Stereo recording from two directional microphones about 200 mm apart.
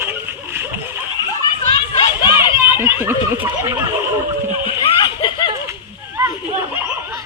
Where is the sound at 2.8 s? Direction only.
10° right (ahead or behind).